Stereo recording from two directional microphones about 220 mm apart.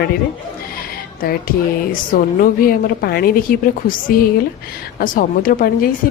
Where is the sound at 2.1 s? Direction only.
40° left (ahead or behind).